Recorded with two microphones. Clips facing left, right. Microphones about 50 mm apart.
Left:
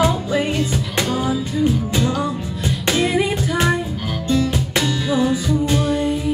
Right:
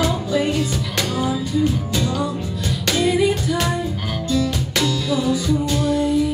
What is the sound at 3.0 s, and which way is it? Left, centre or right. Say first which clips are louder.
Music: right 3 dB; left.